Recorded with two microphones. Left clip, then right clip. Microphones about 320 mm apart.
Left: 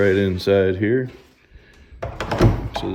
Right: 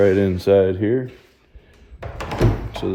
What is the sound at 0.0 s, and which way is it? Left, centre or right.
Speech, centre.